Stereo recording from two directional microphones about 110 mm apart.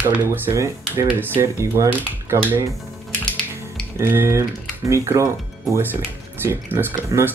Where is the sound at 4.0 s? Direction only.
20° right (ahead or behind).